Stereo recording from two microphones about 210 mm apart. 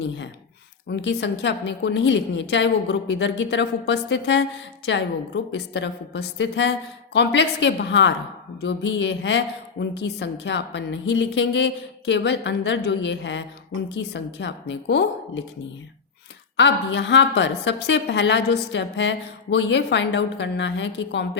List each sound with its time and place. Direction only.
0.9 s a woman's voice: 55° left (ahead or behind)
16.6 s a woman's voice: 60° left (ahead or behind)